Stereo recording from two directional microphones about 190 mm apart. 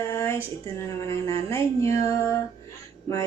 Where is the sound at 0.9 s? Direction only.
15° left (ahead or behind).